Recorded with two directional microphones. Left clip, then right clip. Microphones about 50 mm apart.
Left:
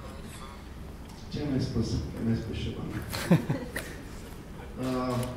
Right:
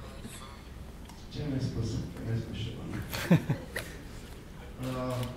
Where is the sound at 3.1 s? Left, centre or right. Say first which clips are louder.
Left 1 dB; left.